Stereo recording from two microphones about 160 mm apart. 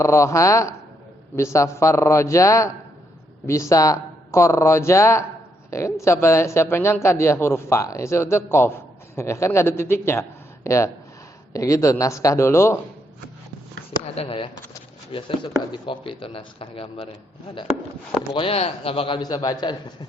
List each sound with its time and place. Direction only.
0.0 s a man's voice: 20° left (ahead or behind)
14.0 s a man's voice: 35° left (ahead or behind)
18.3 s a man's voice: 35° left (ahead or behind)